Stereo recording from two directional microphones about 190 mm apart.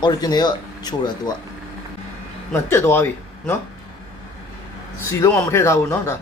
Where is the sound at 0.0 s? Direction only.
20° left (ahead or behind).